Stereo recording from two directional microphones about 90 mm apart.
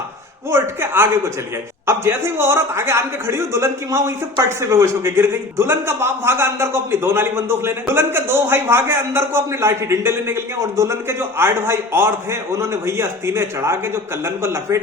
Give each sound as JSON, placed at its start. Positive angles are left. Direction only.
{"t": 0.5, "sound": "a man's voice", "side_deg": -30}